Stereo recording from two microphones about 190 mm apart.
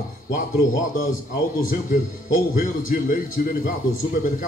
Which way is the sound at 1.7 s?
45° left (ahead or behind).